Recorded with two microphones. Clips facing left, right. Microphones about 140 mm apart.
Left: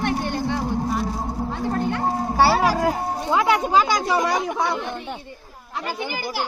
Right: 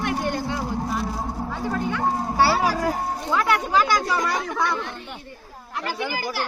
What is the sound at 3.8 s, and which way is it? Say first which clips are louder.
A woman's voice: left 2 dB; 15° left (ahead or behind).